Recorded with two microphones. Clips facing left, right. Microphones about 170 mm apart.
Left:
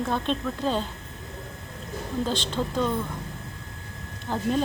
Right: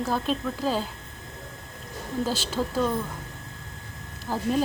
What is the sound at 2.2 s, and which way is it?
Speech, 5° right (ahead or behind).